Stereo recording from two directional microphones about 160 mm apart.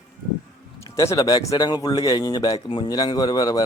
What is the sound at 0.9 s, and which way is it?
Speech, 20° left (ahead or behind).